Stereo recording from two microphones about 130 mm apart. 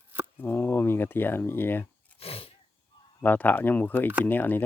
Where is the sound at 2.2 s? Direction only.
50° left (ahead or behind).